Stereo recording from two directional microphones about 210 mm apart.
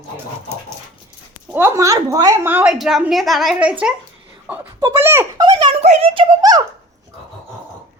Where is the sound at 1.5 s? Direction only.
10° right (ahead or behind).